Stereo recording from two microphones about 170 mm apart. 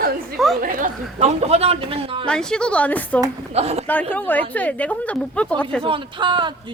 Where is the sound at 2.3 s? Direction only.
5° left (ahead or behind).